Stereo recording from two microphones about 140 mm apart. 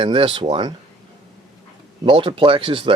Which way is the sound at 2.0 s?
40° right (ahead or behind).